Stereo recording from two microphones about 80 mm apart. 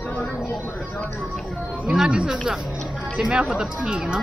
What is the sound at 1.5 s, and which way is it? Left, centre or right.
Music, centre.